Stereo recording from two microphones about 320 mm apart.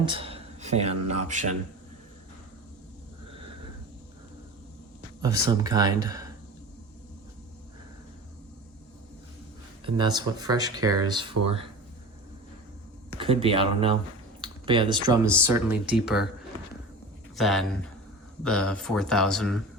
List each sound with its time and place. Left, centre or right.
0.0 s speech: centre
5.2 s speech: centre
9.8 s speech: centre
13.1 s speech: centre
17.3 s speech: centre